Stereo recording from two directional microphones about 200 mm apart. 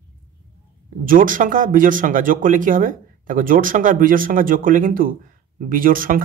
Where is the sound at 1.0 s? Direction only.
45° right (ahead or behind).